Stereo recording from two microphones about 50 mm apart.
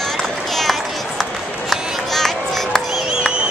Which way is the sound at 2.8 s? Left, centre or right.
Centre.